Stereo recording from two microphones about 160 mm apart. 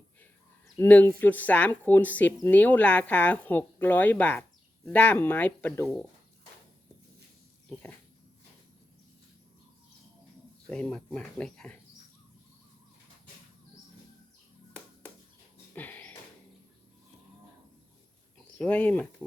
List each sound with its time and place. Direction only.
0.8 s speech: 10° left (ahead or behind)
10.7 s speech: 5° left (ahead or behind)
15.7 s a sound: 10° left (ahead or behind)
18.5 s speech: 10° left (ahead or behind)